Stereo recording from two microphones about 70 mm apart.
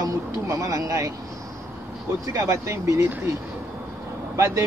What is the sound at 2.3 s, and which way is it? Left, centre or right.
Speech, right.